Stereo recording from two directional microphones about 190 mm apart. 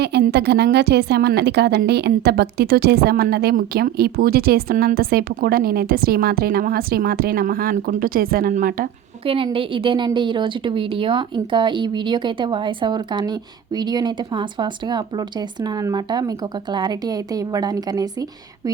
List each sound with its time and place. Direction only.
0.0 s a woman's voice: 60° right (ahead or behind)
9.2 s a woman's voice: 30° right (ahead or behind)